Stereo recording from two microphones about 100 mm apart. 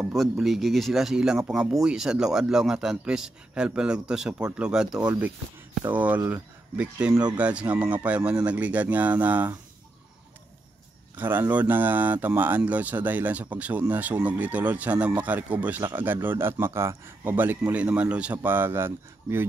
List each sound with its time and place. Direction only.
0.1 s speech: centre (ahead or behind)
4.9 s speech: 40° right (ahead or behind)
5.9 s speech: 15° right (ahead or behind)
11.1 s speech: 20° right (ahead or behind)